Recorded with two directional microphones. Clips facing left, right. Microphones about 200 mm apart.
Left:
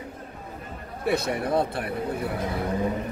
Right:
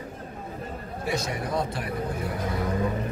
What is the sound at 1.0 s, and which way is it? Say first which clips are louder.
Speech: left 5 dB; 60° left (ahead or behind).